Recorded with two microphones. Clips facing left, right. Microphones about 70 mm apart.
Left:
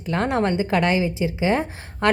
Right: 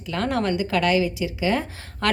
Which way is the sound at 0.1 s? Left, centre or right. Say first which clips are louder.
Left 2 dB; left.